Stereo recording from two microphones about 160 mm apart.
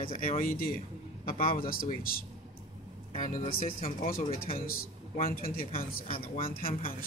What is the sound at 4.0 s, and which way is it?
Speech, 65° left (ahead or behind).